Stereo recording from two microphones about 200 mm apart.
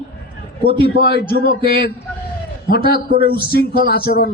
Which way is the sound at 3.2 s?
25° right (ahead or behind).